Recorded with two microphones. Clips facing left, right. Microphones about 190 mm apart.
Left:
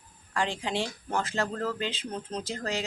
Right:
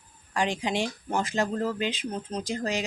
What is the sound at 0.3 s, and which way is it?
Speech, 15° right (ahead or behind).